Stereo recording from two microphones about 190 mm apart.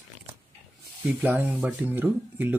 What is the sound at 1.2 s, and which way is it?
Speech, 10° right (ahead or behind).